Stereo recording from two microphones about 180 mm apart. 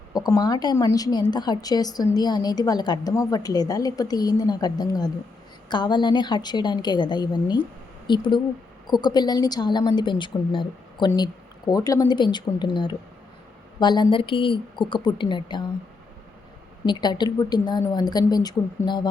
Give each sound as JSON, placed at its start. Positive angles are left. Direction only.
{"t": 0.1, "sound": "a woman's voice", "side_deg": 20}
{"t": 16.8, "sound": "a woman's voice", "side_deg": 25}